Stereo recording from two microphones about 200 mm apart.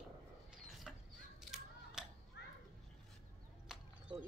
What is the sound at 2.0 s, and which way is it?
Children playing, 5° right (ahead or behind).